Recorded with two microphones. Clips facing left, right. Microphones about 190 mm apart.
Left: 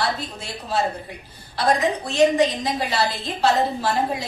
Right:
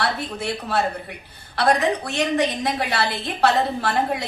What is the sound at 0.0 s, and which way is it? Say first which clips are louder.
A woman's voice: right 2 dB; 60° right (ahead or behind).